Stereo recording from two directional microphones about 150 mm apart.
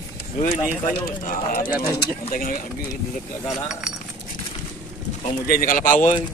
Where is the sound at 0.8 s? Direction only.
70° left (ahead or behind).